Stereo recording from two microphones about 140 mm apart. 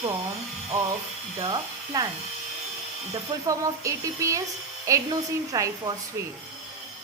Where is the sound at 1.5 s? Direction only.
30° right (ahead or behind).